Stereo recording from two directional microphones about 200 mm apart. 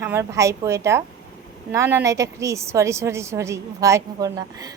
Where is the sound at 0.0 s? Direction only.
15° right (ahead or behind).